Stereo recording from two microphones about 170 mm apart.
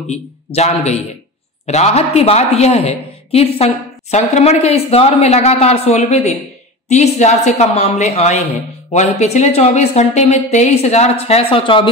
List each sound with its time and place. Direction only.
0.1 s a woman's voice: 40° left (ahead or behind)